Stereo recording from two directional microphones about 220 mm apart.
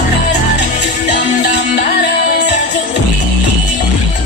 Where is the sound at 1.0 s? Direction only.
35° left (ahead or behind).